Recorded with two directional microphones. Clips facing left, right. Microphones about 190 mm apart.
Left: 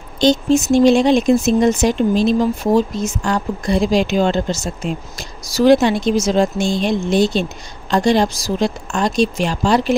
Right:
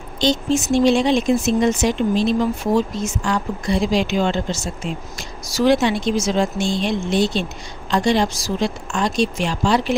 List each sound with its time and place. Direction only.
0.2 s speech: 45° left (ahead or behind)